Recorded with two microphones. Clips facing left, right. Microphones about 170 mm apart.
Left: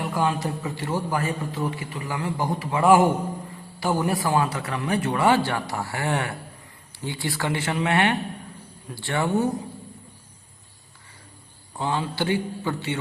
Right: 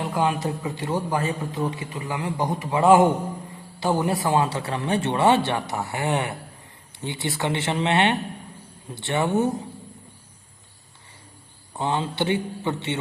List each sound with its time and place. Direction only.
0.0 s a man's voice: 20° right (ahead or behind)
11.8 s a man's voice: 20° right (ahead or behind)